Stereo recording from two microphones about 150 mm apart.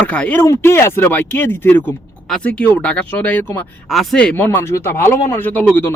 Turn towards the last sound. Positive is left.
turn(degrees=10)  # may be behind; listen again after turning